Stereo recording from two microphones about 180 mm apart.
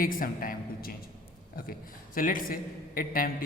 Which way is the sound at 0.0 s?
50° left (ahead or behind).